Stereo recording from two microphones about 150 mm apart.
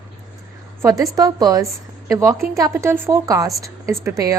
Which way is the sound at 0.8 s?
20° right (ahead or behind).